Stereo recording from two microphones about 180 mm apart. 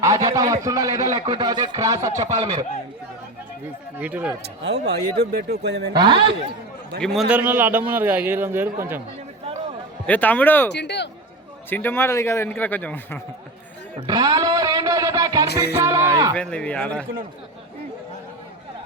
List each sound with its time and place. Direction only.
0.0 s a man's voice: 15° right (ahead or behind)
2.1 s speech: 40° right (ahead or behind)
3.9 s a man's voice: 10° right (ahead or behind)
4.4 s speech: 70° right (ahead or behind)
5.9 s speech: 25° right (ahead or behind)
7.0 s a man's voice: centre (ahead or behind)
10.1 s a man's voice: 10° left (ahead or behind)
10.7 s a man's voice: 70° left (ahead or behind)
11.7 s a man's voice: 10° left (ahead or behind)
14.1 s speech: 20° right (ahead or behind)
15.4 s music: 65° left (ahead or behind)
15.8 s speech: 15° right (ahead or behind)
16.3 s a man's voice: 5° left (ahead or behind)